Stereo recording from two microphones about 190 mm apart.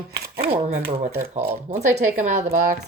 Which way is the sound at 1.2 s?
45° right (ahead or behind).